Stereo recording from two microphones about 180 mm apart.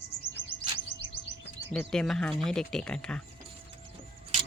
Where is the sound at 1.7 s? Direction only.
5° left (ahead or behind).